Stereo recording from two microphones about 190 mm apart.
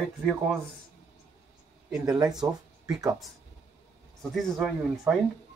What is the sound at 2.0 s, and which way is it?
Speech, 20° right (ahead or behind).